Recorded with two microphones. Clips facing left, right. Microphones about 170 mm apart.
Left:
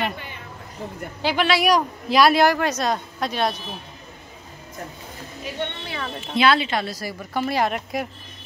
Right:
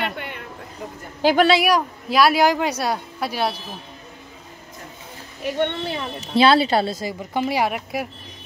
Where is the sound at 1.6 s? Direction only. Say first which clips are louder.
Even; centre (ahead or behind).